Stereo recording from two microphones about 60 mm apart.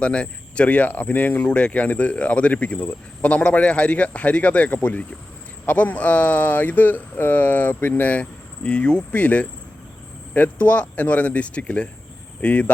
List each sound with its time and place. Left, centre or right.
0.0 s speech: centre